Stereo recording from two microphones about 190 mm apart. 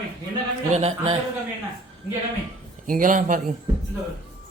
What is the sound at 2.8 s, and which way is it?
Speech, 45° right (ahead or behind).